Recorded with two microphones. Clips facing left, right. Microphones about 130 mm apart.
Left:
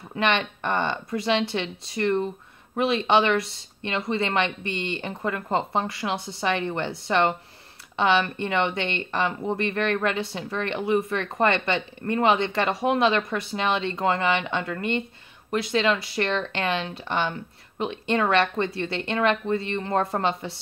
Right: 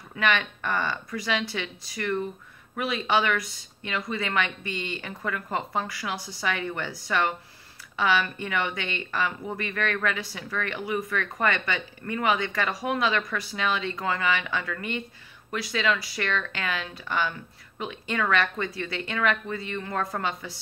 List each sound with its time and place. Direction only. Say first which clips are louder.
0.1 s speech: left 2 dB; 25° left (ahead or behind)